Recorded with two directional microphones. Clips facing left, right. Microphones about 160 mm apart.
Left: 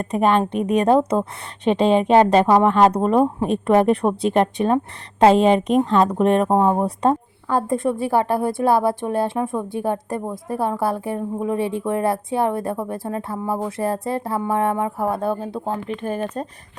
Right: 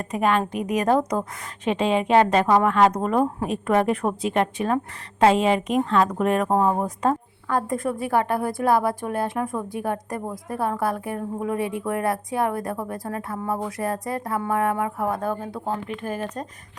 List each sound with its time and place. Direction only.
0.0 s a woman's voice: 35° left (ahead or behind)